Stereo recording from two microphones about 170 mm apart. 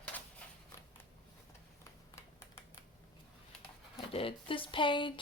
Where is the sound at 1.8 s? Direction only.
15° left (ahead or behind).